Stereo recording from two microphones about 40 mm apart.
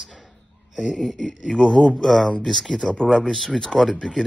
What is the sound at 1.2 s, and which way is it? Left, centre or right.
Speech, left.